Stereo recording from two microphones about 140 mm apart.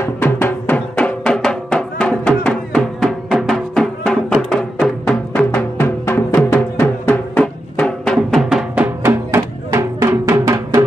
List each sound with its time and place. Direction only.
0.0 s music: 15° left (ahead or behind); by 10.8 s 25° right (ahead or behind)